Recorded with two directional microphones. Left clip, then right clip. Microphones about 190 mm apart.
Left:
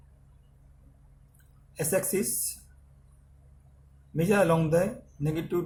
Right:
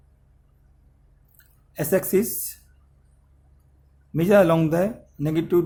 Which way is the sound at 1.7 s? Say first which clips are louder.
Right 7 dB; 50° right (ahead or behind).